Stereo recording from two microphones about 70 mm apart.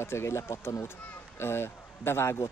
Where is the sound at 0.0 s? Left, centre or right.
Left.